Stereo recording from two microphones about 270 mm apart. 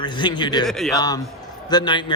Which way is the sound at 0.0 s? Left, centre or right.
Centre.